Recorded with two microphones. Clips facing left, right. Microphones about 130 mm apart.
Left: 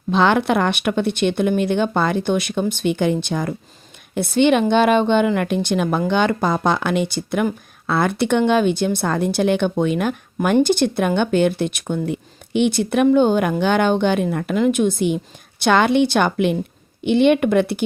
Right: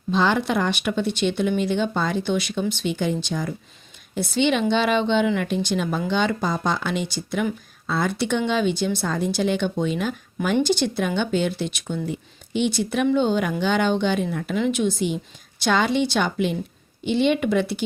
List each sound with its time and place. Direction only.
0.1 s speech: 65° left (ahead or behind)